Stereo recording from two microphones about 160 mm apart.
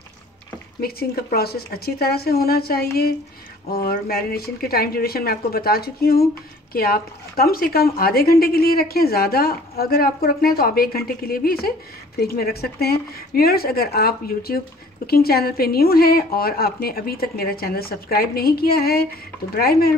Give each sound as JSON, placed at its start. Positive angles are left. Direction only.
{"t": 0.7, "sound": "a woman's voice", "side_deg": 75}